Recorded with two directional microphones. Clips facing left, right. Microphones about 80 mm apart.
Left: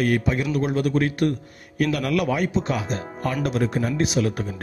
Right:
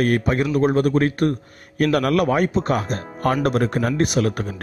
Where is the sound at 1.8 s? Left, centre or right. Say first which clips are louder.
Right 4 dB; right.